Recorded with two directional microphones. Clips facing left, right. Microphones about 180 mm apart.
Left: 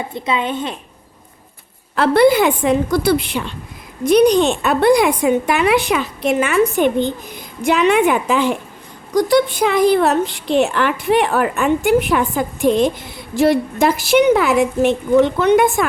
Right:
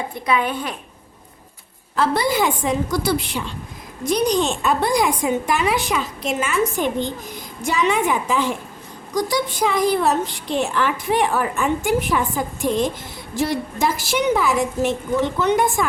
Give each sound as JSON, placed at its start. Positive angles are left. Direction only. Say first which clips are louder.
{"t": 0.1, "sound": "speech", "louder": "even", "side_deg": 25}
{"t": 2.0, "sound": "a woman's voice", "louder": "left 7 dB", "side_deg": 60}